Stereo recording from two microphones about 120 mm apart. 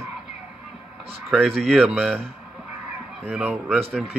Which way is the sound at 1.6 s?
5° right (ahead or behind).